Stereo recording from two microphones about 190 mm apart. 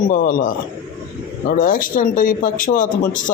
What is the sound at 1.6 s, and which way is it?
Speech, 45° left (ahead or behind).